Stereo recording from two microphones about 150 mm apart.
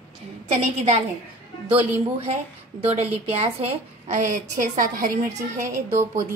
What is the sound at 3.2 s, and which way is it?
A woman's voice, 45° right (ahead or behind).